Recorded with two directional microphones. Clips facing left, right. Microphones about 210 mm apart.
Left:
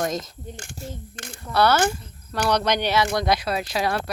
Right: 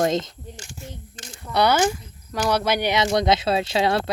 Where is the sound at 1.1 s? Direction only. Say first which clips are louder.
Left 3 dB; 60° left (ahead or behind).